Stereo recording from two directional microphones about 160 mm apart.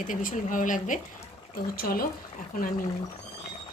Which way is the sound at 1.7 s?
65° left (ahead or behind).